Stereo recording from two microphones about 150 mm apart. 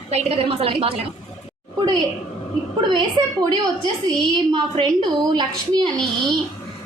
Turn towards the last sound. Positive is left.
turn(degrees=0)  # may be behind; listen again after turning